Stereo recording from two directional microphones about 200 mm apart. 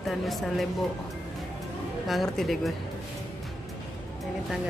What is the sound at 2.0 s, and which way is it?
Speech, centre (ahead or behind).